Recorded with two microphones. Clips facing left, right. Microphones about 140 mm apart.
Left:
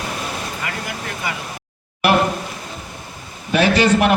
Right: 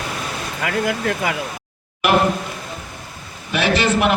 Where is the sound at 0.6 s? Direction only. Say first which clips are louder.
Right 7 dB; 90° right.